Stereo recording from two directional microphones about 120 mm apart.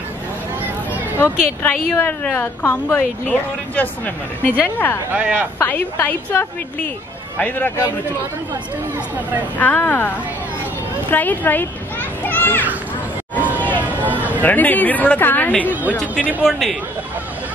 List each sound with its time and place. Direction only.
1.6 s a woman's voice: 15° left (ahead or behind)
5.1 s speech: 15° right (ahead or behind)
5.6 s a woman's voice: 15° left (ahead or behind)
9.6 s a woman's voice: 15° left (ahead or behind)
13.8 s a sound: 15° right (ahead or behind)
14.4 s a woman's voice: 15° left (ahead or behind)
15.6 s speech: 15° right (ahead or behind)
15.9 s a woman's voice: 10° left (ahead or behind)
16.4 s a man's voice: centre (ahead or behind)